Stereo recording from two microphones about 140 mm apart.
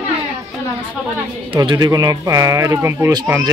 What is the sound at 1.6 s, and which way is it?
Speech, 25° right (ahead or behind).